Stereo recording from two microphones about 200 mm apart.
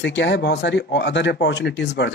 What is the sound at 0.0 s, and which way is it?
Speech, 65° left (ahead or behind).